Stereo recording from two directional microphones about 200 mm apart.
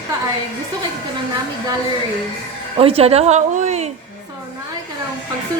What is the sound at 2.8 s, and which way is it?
A woman's voice, 30° right (ahead or behind).